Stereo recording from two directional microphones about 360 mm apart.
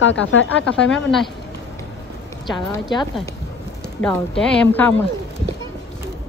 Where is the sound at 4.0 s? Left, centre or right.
Centre.